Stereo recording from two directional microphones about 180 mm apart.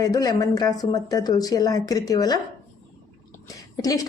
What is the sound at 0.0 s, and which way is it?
Speech, 20° left (ahead or behind).